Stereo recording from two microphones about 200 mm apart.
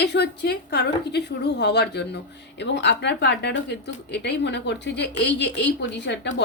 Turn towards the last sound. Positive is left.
turn(degrees=60)  # may be behind; listen again after turning